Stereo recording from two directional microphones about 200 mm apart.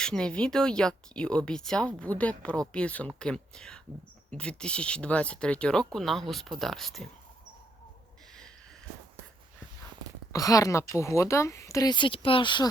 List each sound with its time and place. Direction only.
0.0 s speech: 5° left (ahead or behind)
10.3 s speech: 15° left (ahead or behind)